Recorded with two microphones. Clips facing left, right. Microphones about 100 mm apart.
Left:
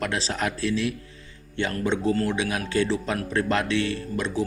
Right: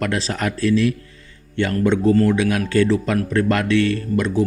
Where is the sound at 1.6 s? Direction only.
65° right (ahead or behind).